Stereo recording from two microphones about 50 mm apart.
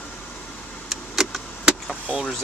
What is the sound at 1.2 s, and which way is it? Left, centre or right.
Vehicle, centre.